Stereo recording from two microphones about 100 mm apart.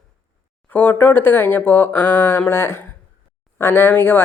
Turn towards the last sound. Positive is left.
turn(degrees=20)  # may be behind; listen again after turning